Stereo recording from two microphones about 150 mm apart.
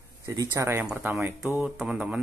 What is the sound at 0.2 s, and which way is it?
Speech, 20° right (ahead or behind).